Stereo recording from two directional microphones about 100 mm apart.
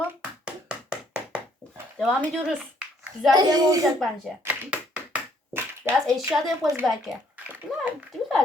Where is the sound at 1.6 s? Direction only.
15° right (ahead or behind).